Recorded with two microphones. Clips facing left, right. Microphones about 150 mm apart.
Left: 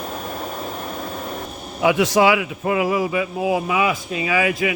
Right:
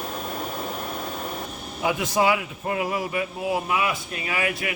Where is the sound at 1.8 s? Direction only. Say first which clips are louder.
Left 6 dB; 90° left.